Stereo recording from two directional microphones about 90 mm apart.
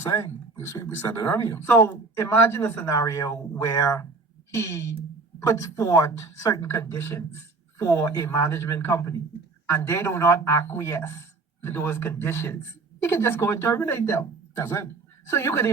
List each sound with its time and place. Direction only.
0.0 s a man's voice: 25° left (ahead or behind)